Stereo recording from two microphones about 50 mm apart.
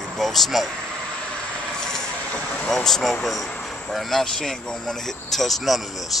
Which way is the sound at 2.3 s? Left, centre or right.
Left.